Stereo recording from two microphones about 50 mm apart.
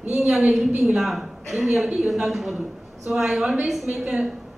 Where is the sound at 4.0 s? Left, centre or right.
Centre.